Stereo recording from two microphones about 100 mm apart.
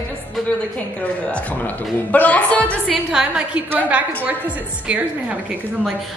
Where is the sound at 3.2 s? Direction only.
15° right (ahead or behind).